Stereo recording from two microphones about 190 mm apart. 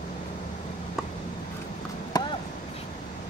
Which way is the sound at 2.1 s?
25° left (ahead or behind).